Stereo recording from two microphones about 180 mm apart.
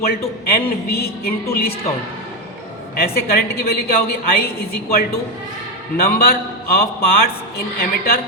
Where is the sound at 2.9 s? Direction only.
60° left (ahead or behind).